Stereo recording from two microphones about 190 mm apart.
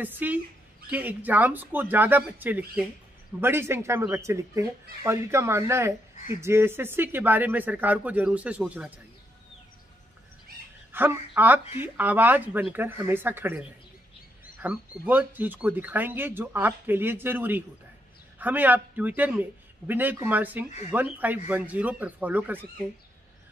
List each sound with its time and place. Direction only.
0.0 s speech: 10° right (ahead or behind)
10.9 s speech: 10° right (ahead or behind)